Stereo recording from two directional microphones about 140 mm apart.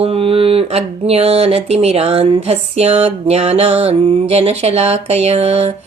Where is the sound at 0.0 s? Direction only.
45° right (ahead or behind).